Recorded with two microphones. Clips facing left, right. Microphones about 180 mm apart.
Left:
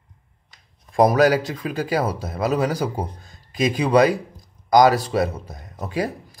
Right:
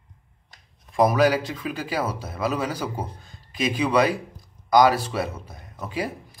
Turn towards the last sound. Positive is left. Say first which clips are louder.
# left 4 dB
turn(degrees=40)  # may be behind; listen again after turning